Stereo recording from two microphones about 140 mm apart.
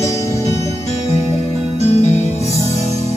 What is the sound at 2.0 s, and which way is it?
Music, 55° left (ahead or behind).